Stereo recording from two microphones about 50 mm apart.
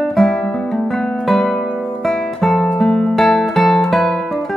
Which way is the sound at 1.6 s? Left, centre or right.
Left.